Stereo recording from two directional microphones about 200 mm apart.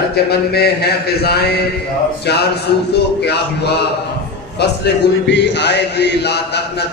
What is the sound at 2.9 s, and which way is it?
Speech, 55° left (ahead or behind).